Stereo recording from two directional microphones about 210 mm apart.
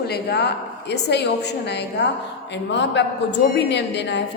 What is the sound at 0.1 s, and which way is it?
A woman's voice, 50° left (ahead or behind).